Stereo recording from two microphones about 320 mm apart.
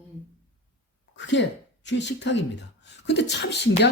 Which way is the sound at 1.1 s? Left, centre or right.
Left.